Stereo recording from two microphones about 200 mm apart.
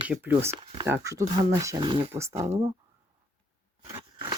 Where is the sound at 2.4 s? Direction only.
30° right (ahead or behind).